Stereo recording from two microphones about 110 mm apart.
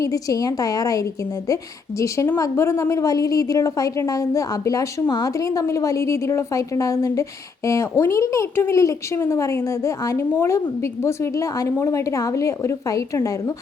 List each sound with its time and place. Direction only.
0.0 s a woman's voice: 30° left (ahead or behind)